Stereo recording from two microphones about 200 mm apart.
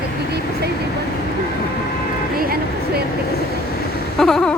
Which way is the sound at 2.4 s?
50° right (ahead or behind).